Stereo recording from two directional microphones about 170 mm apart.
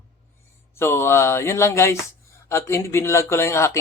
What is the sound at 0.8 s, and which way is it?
Speech, 15° left (ahead or behind).